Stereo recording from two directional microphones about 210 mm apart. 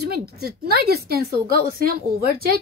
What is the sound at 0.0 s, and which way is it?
A woman's voice, 50° right (ahead or behind).